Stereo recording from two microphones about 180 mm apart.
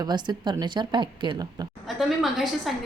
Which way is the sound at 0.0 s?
25° right (ahead or behind).